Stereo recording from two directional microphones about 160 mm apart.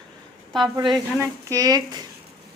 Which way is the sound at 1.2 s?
20° right (ahead or behind).